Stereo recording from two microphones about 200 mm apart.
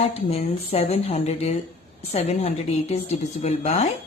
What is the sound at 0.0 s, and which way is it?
Speech, 30° left (ahead or behind).